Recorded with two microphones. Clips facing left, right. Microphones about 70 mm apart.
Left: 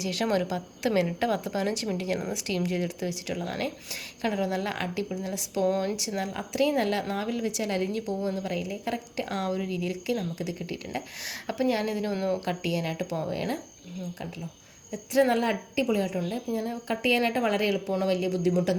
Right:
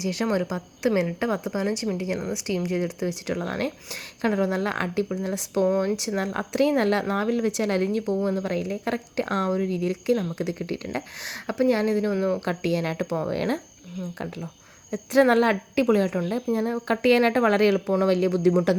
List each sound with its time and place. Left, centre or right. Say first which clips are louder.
0.0 s a woman's voice: right 2 dB; right
5.6 s a woman's voice: right 3 dB; right
6.1 s a woman's voice: right 3 dB; right
12.1 s a woman's voice: right 4 dB; right
12.5 s a woman's voice: right 4 dB; right